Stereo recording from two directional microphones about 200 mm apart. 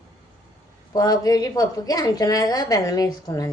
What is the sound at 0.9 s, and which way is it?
A woman's voice, 20° left (ahead or behind).